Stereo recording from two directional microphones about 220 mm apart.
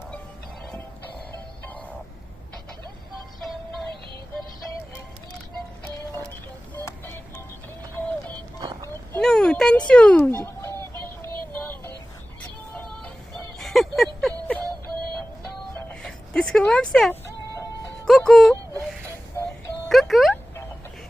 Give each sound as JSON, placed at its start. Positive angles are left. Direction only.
{"t": 6.7, "sound": "music", "side_deg": 10}
{"t": 8.6, "sound": "a sound", "side_deg": -15}
{"t": 8.9, "sound": "a sound", "side_deg": 5}
{"t": 10.3, "sound": "music", "side_deg": 10}
{"t": 12.7, "sound": "music", "side_deg": 5}
{"t": 15.7, "sound": "music", "side_deg": 5}
{"t": 19.9, "sound": "music", "side_deg": 0}